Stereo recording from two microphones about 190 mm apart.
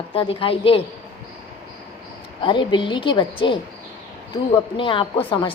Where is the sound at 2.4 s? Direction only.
25° left (ahead or behind).